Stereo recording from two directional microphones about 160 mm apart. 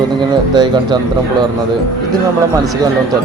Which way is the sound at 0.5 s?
25° right (ahead or behind).